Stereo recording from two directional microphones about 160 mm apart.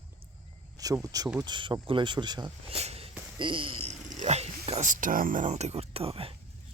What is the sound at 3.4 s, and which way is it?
Speech, 30° right (ahead or behind).